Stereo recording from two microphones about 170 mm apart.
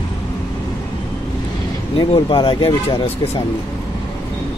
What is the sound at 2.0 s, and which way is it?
Speech, 25° left (ahead or behind).